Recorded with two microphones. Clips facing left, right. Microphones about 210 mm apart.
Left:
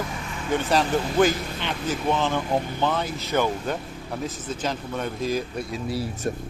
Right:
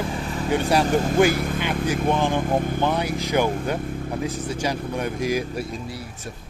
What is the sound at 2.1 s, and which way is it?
Speech, 15° right (ahead or behind).